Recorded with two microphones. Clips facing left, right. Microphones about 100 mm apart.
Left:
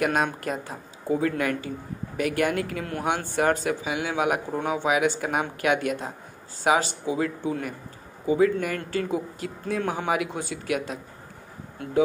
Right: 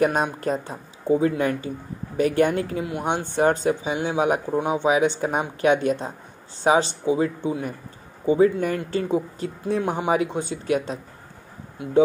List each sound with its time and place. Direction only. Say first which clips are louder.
0.0 s speech: right 3 dB; 30° right (ahead or behind)
2.8 s speech: right 3 dB; 10° right (ahead or behind)
3.1 s speech: right 2 dB; 25° right (ahead or behind)
4.5 s speech: right 4 dB; 20° right (ahead or behind)
4.8 s speech: right 2 dB; 30° right (ahead or behind)
11.8 s speech: right 3 dB; 15° right (ahead or behind)